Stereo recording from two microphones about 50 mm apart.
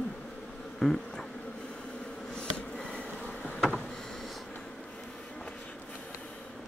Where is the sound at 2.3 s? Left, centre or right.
Centre.